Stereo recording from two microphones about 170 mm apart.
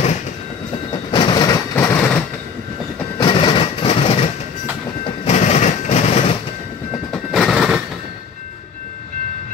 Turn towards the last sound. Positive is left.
turn(degrees=-5)  # may be behind; listen again after turning